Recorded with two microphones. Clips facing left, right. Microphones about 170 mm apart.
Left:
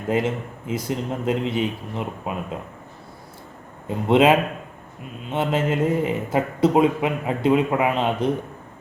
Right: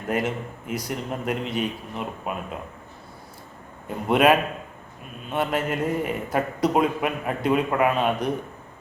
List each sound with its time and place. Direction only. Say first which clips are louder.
0.1 s a man's voice: left 3 dB; 25° left (ahead or behind)
3.8 s a man's voice: left 2 dB; 25° left (ahead or behind)